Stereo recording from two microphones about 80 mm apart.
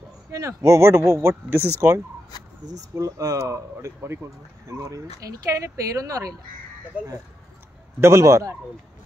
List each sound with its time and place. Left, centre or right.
0.3 s speech: right
2.6 s speech: right
8.0 s speech: right